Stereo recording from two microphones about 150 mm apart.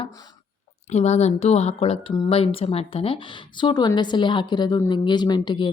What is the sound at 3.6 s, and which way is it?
A woman's voice, 25° left (ahead or behind).